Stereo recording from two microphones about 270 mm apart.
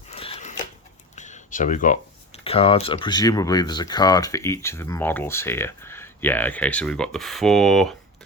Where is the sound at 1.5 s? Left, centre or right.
Left.